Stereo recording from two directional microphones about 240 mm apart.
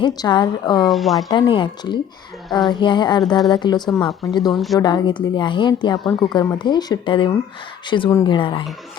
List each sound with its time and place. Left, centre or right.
0.0 s speech: centre
0.9 s speech: centre
1.3 s a woman's voice: centre
4.5 s speech: centre
4.8 s a woman's voice: centre